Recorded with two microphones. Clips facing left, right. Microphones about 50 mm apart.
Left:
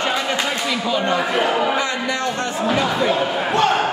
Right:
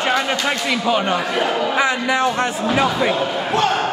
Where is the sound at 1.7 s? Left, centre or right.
Centre.